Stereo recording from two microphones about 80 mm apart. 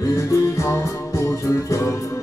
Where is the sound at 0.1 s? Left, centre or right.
Left.